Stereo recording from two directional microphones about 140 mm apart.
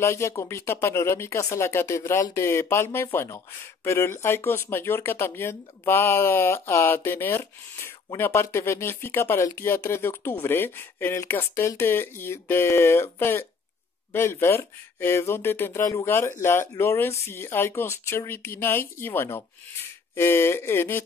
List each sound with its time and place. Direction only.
0.0 s speech: 20° left (ahead or behind)